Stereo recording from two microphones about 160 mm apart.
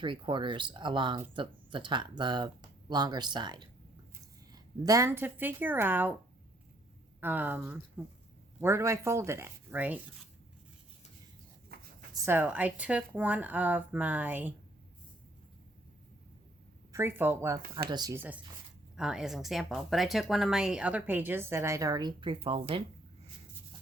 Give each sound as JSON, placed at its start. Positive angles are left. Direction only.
{"t": 0.0, "sound": "speech", "side_deg": -30}
{"t": 7.2, "sound": "speech", "side_deg": -10}
{"t": 11.7, "sound": "writing", "side_deg": -75}
{"t": 12.1, "sound": "speech", "side_deg": -15}
{"t": 16.9, "sound": "speech", "side_deg": -15}
{"t": 18.2, "sound": "speech", "side_deg": -10}